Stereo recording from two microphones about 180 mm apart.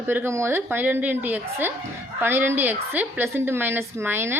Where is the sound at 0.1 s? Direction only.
15° right (ahead or behind).